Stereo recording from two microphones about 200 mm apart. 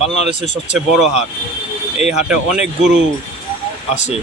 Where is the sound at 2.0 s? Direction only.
Centre (ahead or behind).